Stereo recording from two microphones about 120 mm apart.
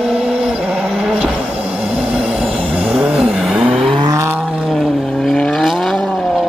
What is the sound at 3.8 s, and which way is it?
Vehicle, 40° right (ahead or behind).